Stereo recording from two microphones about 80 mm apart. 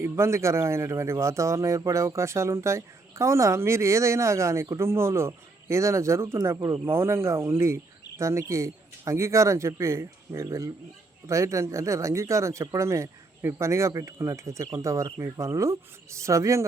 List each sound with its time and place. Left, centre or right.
0.0 s speech: right